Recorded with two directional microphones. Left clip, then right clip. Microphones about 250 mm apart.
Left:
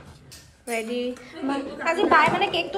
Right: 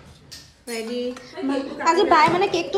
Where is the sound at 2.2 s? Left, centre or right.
Right.